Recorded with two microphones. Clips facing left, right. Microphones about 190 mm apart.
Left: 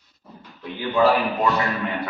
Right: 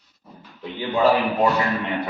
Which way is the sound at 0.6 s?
20° right (ahead or behind).